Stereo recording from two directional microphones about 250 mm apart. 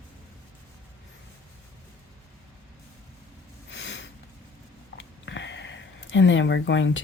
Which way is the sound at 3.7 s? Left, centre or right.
Left.